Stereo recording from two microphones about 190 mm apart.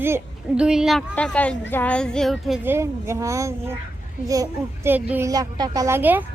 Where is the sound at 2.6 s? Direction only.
15° right (ahead or behind).